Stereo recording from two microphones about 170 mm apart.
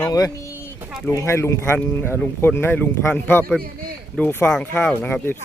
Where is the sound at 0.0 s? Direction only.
20° left (ahead or behind).